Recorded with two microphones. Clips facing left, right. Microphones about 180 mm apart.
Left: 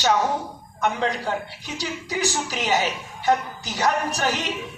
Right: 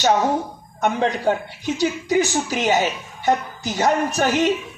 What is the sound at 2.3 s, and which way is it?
Speech, 50° right (ahead or behind).